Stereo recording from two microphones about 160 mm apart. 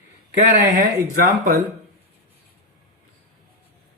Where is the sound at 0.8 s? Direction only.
60° right (ahead or behind).